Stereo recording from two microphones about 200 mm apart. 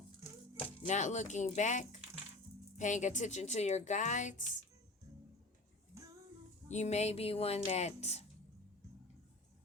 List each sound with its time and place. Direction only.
0.9 s a woman's voice: 35° left (ahead or behind)
6.7 s a woman's voice: 35° left (ahead or behind)